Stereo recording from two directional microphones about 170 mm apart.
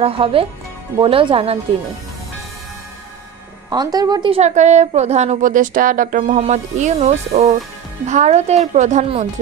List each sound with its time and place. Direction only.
0.0 s speech: 35° right (ahead or behind)
3.7 s speech: 25° right (ahead or behind)
4.4 s a woman's voice: 45° right (ahead or behind)